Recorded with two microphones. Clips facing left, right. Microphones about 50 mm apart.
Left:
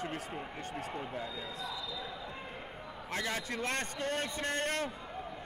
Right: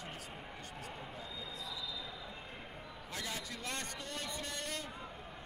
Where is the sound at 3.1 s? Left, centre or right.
Left.